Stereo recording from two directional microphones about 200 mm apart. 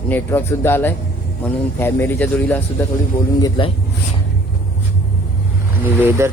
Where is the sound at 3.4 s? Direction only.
20° left (ahead or behind).